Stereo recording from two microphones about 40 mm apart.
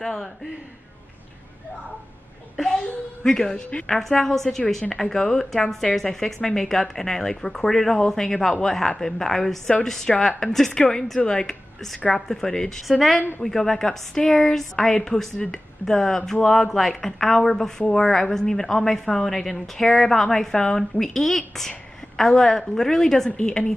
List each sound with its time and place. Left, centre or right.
0.0 s a woman's voice: centre
3.3 s a woman's voice: centre